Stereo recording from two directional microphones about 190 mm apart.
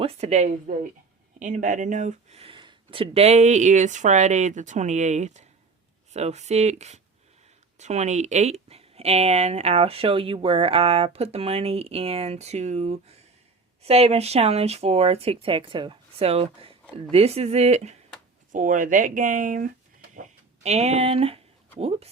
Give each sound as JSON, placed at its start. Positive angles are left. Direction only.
{"t": 0.0, "sound": "speech", "side_deg": -35}
{"t": 20.7, "sound": "speech", "side_deg": -35}